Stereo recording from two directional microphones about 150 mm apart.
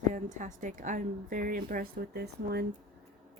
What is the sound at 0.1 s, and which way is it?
A woman's voice, 55° right (ahead or behind).